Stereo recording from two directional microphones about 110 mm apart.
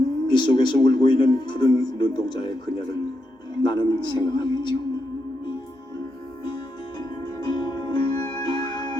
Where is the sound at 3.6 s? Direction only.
45° left (ahead or behind).